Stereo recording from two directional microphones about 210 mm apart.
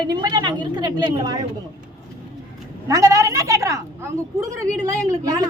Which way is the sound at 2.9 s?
15° right (ahead or behind).